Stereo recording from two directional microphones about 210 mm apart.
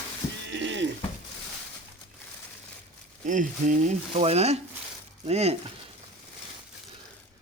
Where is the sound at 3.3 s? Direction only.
40° right (ahead or behind).